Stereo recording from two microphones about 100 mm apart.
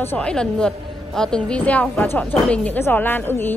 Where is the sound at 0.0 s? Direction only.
20° left (ahead or behind).